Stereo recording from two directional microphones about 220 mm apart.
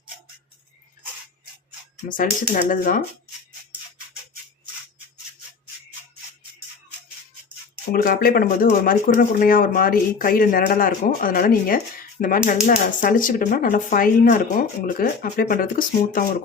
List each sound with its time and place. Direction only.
2.0 s speech: 40° left (ahead or behind)
8.0 s speech: 45° left (ahead or behind)